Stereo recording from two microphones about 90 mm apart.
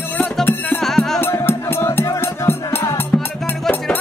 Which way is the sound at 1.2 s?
25° left (ahead or behind).